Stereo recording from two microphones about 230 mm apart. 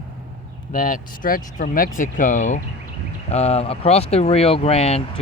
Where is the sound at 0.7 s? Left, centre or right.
Left.